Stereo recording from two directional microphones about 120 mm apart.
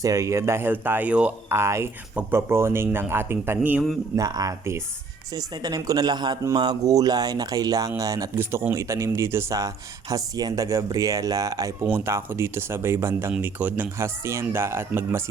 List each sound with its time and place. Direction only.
0.0 s speech: 25° right (ahead or behind); by 1.3 s 10° right (ahead or behind)
1.5 s speech: 20° right (ahead or behind)
4.1 s speech: 30° right (ahead or behind)